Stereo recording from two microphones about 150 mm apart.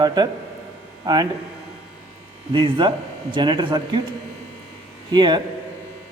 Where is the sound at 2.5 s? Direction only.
30° right (ahead or behind).